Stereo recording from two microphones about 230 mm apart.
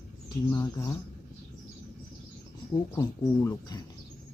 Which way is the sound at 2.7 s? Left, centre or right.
Centre.